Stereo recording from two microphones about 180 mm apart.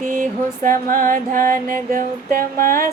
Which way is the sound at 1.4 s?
15° left (ahead or behind).